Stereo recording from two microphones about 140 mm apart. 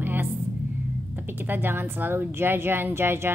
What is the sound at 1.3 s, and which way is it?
A woman's voice, 15° right (ahead or behind).